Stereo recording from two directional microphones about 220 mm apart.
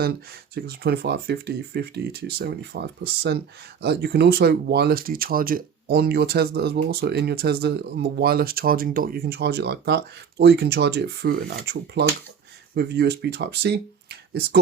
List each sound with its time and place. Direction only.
0.0 s speech: 45° right (ahead or behind)